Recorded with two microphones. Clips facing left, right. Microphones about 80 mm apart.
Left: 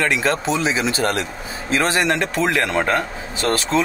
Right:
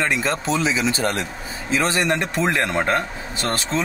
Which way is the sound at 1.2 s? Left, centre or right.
Left.